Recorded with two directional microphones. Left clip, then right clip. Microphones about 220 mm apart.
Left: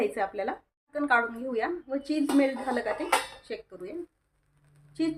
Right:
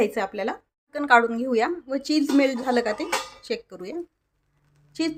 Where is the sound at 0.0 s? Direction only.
40° right (ahead or behind).